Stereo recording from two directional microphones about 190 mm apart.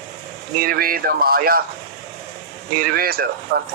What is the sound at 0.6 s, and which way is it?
Speech, 50° right (ahead or behind).